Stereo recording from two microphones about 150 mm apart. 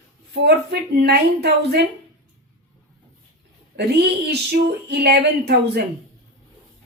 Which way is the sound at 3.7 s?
90° right.